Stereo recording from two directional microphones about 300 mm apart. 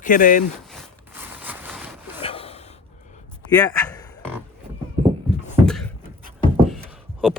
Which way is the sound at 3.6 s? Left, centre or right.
Centre.